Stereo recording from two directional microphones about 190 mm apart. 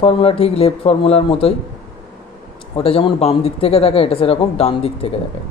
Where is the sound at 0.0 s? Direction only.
30° left (ahead or behind).